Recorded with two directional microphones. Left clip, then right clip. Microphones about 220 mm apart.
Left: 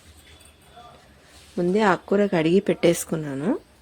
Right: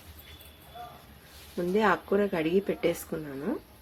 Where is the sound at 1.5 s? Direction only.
40° left (ahead or behind).